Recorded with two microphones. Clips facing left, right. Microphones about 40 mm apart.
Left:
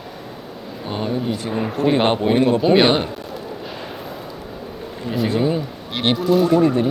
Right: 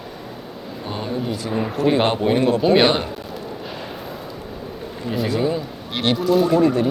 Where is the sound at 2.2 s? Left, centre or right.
Centre.